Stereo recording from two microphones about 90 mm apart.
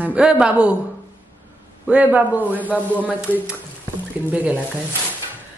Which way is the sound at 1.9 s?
15° right (ahead or behind).